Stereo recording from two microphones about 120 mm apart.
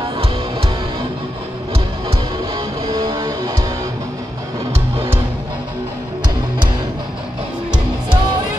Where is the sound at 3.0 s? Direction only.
30° right (ahead or behind).